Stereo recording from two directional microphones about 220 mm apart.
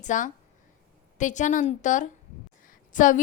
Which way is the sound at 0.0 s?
35° left (ahead or behind).